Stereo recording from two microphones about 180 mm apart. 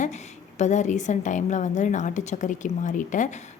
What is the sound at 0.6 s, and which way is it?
A woman's voice, 40° left (ahead or behind).